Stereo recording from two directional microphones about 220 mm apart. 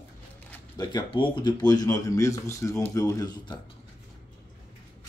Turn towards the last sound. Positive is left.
turn(degrees=20)  # may be behind; listen again after turning